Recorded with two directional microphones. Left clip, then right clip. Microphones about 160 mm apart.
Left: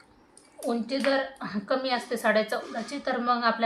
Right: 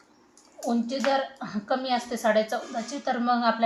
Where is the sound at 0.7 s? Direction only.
30° left (ahead or behind).